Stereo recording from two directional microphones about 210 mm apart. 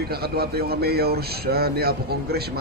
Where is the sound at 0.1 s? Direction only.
50° right (ahead or behind).